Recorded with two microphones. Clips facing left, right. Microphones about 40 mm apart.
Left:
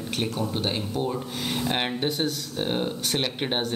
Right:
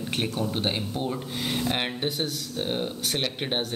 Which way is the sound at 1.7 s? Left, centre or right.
Centre.